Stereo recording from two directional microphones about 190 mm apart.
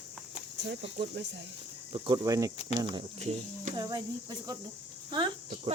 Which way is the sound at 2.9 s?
35° right (ahead or behind).